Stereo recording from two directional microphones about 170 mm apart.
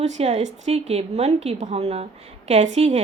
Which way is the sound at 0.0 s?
40° right (ahead or behind).